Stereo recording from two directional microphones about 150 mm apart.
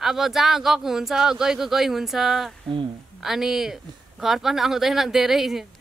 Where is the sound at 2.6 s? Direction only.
35° right (ahead or behind).